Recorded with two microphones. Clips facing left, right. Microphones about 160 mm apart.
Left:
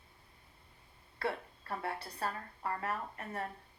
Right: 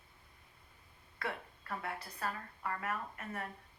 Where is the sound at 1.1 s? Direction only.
30° left (ahead or behind).